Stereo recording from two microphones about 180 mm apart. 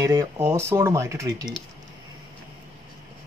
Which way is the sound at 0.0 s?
15° right (ahead or behind).